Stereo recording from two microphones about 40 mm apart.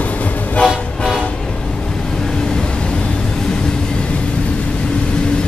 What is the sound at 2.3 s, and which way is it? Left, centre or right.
Vehicle, centre.